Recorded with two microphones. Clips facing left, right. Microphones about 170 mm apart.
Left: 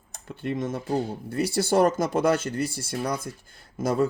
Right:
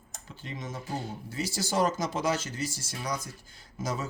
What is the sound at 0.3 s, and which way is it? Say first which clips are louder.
Speech: left 11 dB; 60° left (ahead or behind).